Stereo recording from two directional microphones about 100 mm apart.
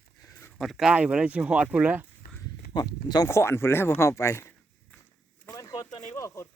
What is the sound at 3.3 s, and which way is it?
Speech, 25° left (ahead or behind).